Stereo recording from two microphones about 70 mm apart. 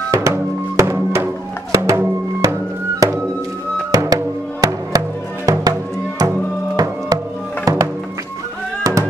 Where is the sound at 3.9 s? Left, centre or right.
Right.